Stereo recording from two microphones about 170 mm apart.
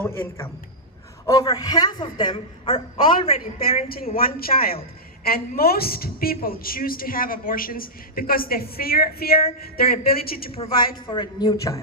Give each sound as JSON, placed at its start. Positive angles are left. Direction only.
{"t": 0.0, "sound": "a man's voice", "side_deg": 15}
{"t": 3.4, "sound": "a woman's voice", "side_deg": 60}
{"t": 10.5, "sound": "a woman's voice", "side_deg": 35}